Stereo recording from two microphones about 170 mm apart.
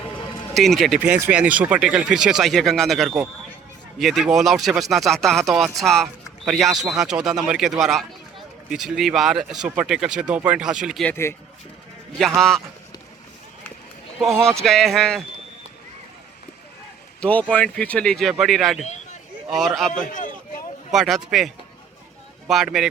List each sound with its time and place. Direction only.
0.5 s speech: centre (ahead or behind)
11.0 s speech: 15° left (ahead or behind)
12.4 s speech: centre (ahead or behind)
14.6 s speech: centre (ahead or behind)
17.2 s speech: 5° left (ahead or behind)
20.1 s vehicle: 50° left (ahead or behind)
20.9 s speech: centre (ahead or behind)